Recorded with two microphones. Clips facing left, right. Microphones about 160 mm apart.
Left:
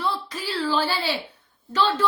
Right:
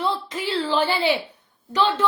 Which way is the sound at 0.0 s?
20° right (ahead or behind).